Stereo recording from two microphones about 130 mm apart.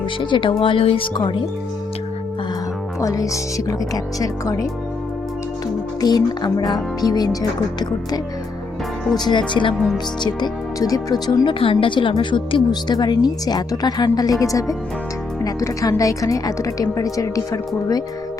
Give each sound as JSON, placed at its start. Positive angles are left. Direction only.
{"t": 0.2, "sound": "speech", "side_deg": 40}
{"t": 3.0, "sound": "a woman's voice", "side_deg": 25}
{"t": 6.0, "sound": "a woman's voice", "side_deg": 30}